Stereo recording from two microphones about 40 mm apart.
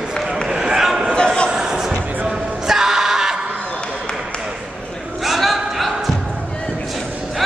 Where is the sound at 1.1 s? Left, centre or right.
Left.